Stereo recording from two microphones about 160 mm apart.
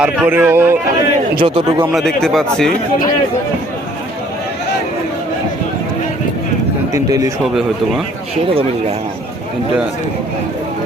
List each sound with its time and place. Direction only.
0.0 s speech: 10° right (ahead or behind)
1.4 s a man's voice: 35° right (ahead or behind)
1.9 s speech: centre (ahead or behind)
6.9 s a man's voice: 20° right (ahead or behind)